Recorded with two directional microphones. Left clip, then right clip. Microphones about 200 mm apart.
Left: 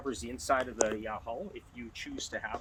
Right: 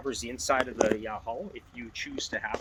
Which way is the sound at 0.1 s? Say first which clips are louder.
Right 3 dB; 45° right (ahead or behind).